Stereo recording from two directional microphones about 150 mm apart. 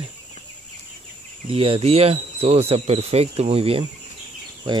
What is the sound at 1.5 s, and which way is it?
Speech, 35° right (ahead or behind).